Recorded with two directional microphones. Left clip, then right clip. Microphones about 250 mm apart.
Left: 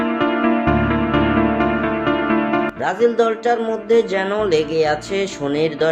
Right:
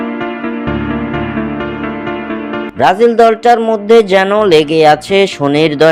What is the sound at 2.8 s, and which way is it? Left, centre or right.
Speech, right.